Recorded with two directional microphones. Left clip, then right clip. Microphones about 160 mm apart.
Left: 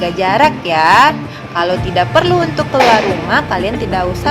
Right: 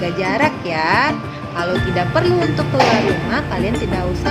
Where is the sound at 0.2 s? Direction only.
10° right (ahead or behind).